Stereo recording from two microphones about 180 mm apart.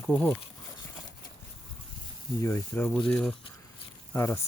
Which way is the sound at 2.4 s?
10° left (ahead or behind).